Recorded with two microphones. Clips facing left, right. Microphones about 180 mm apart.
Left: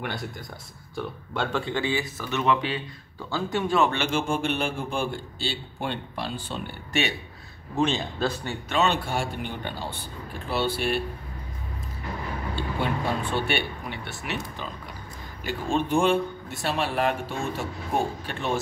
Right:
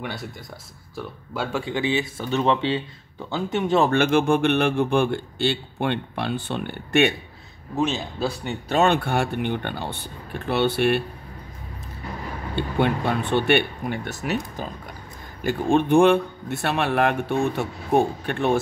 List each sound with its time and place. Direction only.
0.0 s a man's voice: centre (ahead or behind); by 3.8 s 20° right (ahead or behind)
3.9 s a man's voice: 55° right (ahead or behind)
7.7 s a man's voice: 5° right (ahead or behind)
8.6 s a man's voice: 50° right (ahead or behind)
12.5 s a man's voice: 60° right (ahead or behind); by 14.7 s 40° right (ahead or behind)
15.4 s a man's voice: 60° right (ahead or behind)